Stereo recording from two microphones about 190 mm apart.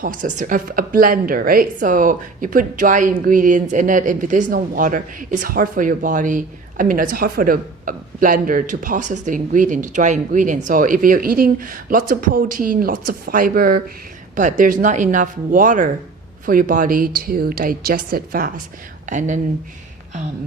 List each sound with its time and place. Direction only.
0.0 s speech: 45° right (ahead or behind)